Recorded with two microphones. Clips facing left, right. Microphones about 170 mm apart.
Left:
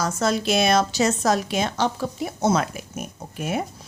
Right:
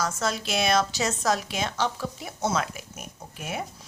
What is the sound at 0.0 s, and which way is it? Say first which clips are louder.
A woman's voice: left 6 dB; 55° left (ahead or behind).